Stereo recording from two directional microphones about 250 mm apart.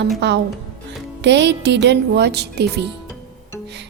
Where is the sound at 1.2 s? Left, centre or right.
Right.